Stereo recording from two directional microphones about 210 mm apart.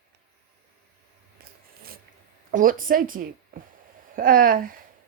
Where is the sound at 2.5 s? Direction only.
40° right (ahead or behind).